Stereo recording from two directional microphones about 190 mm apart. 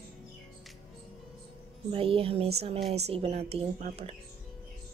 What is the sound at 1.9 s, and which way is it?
A woman's voice, 30° right (ahead or behind).